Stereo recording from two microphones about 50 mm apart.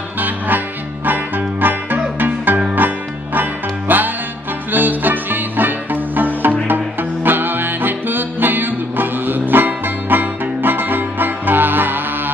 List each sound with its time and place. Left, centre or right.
1.0 s music: right